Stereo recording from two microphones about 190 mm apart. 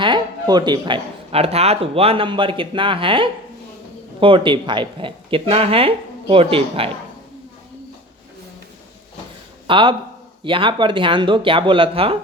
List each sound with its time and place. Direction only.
0.0 s speech: 25° right (ahead or behind)
9.6 s speech: 25° right (ahead or behind)